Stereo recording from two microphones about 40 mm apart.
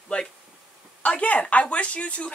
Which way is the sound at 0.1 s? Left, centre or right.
Left.